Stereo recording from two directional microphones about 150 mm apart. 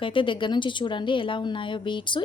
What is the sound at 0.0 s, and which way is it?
Speech, 35° left (ahead or behind).